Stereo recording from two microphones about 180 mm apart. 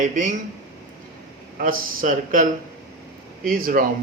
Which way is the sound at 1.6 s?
45° right (ahead or behind).